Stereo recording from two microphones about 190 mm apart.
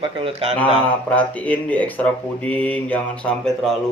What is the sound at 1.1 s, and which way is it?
Speech, 10° left (ahead or behind).